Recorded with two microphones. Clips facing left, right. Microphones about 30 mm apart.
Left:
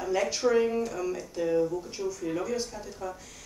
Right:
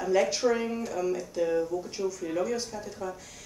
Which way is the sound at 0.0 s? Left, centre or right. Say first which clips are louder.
Right 2 dB; centre.